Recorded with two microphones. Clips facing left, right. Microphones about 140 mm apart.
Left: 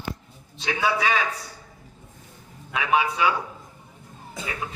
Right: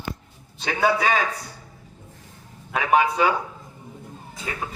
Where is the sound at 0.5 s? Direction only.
50° right (ahead or behind).